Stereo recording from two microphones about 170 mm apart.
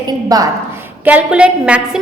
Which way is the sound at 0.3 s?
20° right (ahead or behind).